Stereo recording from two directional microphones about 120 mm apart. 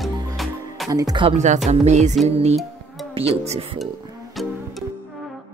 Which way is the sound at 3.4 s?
65° right (ahead or behind).